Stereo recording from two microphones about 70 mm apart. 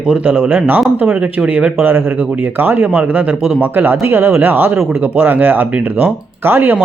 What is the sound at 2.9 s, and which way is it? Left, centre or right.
Speech, right.